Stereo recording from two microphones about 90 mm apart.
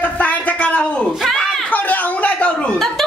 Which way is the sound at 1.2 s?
5° left (ahead or behind).